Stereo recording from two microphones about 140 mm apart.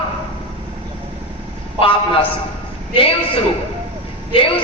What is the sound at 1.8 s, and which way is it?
Speech, 40° left (ahead or behind).